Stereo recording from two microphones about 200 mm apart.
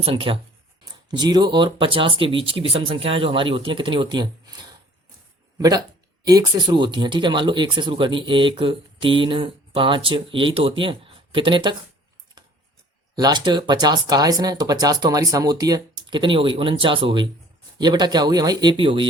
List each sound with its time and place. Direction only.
0.0 s speech: 30° right (ahead or behind)
13.1 s speech: 20° right (ahead or behind)